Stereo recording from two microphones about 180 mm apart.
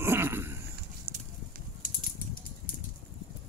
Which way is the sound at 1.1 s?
30° right (ahead or behind).